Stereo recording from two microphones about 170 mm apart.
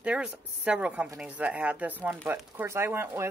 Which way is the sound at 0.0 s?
5° right (ahead or behind).